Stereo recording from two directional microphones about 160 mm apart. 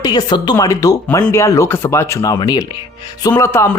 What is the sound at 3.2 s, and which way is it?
Speech, 15° left (ahead or behind).